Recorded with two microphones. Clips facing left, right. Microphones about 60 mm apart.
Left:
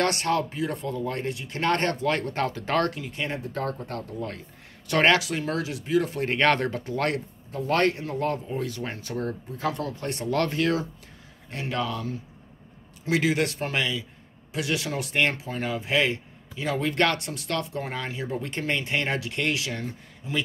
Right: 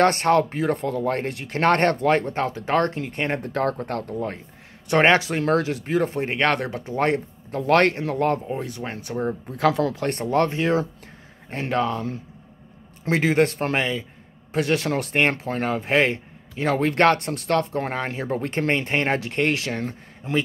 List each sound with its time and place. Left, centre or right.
0.0 s speech: right
2.0 s speech: right
2.3 s speech: centre
2.9 s speech: right
4.8 s speech: right
5.5 s speech: right
6.2 s speech: centre
6.8 s speech: right
7.5 s speech: right
8.5 s speech: right
9.6 s speech: right
10.0 s speech: right
10.3 s speech: right
11.7 s speech: right